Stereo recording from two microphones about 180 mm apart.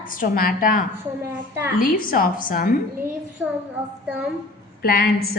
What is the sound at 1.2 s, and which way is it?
Speech, 15° right (ahead or behind).